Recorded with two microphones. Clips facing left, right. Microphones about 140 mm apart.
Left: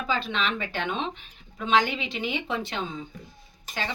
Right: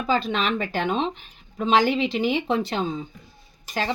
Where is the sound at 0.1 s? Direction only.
40° right (ahead or behind).